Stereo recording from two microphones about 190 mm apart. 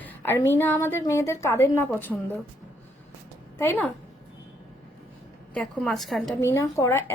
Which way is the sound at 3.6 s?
10° left (ahead or behind).